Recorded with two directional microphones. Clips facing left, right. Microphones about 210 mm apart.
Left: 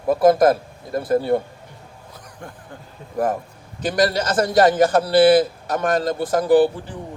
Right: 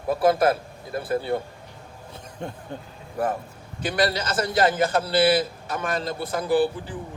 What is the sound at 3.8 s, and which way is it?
Speech, 45° left (ahead or behind).